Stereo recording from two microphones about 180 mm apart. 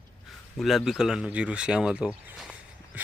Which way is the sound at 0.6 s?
Centre (ahead or behind).